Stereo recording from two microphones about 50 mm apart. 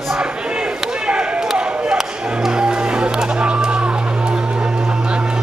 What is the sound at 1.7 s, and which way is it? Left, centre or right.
Chop, right.